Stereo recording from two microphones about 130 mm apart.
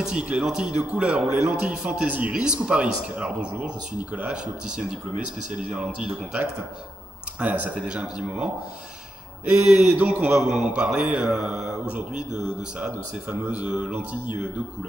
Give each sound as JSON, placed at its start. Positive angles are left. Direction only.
{"t": 0.0, "sound": "a man's voice", "side_deg": -10}
{"t": 9.9, "sound": "a man's voice", "side_deg": -10}